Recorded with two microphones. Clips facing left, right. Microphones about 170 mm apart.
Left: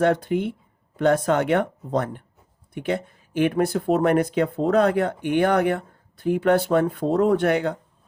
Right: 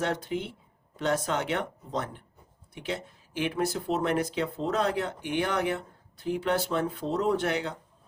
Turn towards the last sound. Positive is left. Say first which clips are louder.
# left 7 dB
turn(degrees=55)  # may be behind; listen again after turning